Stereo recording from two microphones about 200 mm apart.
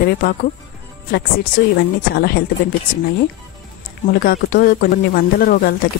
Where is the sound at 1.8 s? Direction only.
55° left (ahead or behind).